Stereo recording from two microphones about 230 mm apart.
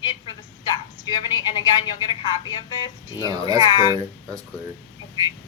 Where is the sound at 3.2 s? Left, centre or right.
Centre.